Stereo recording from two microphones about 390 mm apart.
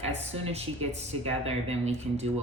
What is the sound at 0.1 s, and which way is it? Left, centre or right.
Speech, centre.